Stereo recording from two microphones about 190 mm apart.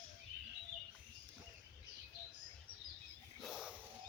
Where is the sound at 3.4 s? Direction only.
Centre (ahead or behind).